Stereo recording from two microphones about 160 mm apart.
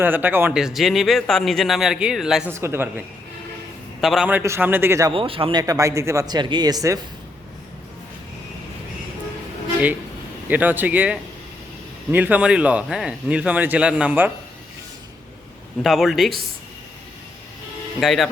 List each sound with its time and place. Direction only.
0.0 s speech: 10° right (ahead or behind)
0.6 s speech: centre (ahead or behind)
2.5 s speech: 15° right (ahead or behind)
4.0 s speech: centre (ahead or behind)
5.1 s speech: 35° right (ahead or behind)
10.5 s speech: 10° right (ahead or behind)
15.8 s speech: centre (ahead or behind)
18.0 s speech: centre (ahead or behind)